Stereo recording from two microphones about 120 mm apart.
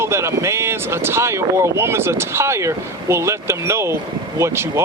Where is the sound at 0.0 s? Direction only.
20° right (ahead or behind).